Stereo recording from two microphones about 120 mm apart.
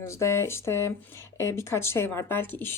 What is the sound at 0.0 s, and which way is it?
A woman's voice, 25° left (ahead or behind).